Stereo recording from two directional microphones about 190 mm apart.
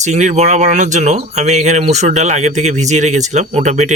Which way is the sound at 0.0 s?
40° right (ahead or behind).